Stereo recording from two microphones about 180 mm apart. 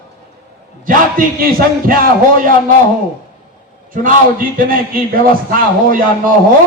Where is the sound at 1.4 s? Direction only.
55° right (ahead or behind).